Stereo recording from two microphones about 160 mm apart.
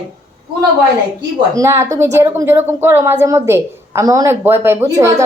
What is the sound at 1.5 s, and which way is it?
A woman's voice, 15° right (ahead or behind).